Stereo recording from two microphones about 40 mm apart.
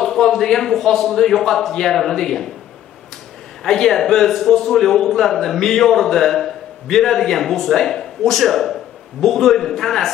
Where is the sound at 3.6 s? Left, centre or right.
Centre.